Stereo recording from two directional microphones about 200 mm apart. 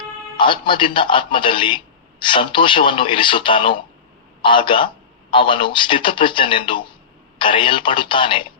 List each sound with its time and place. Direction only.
0.3 s a man's voice: 25° left (ahead or behind)